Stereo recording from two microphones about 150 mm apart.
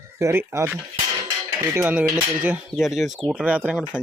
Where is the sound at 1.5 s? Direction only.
15° right (ahead or behind).